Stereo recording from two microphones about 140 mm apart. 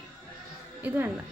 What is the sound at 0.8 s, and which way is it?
Speech, 15° right (ahead or behind).